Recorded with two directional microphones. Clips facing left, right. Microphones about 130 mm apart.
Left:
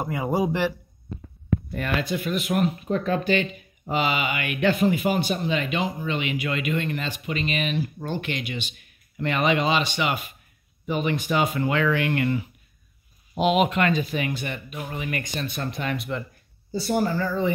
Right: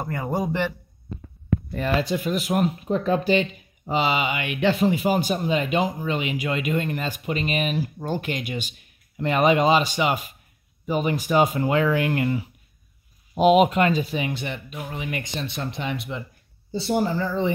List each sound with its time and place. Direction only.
0.0 s speech: 10° left (ahead or behind)
1.8 s speech: 35° right (ahead or behind)
14.8 s speech: 5° right (ahead or behind)
15.4 s speech: 25° right (ahead or behind)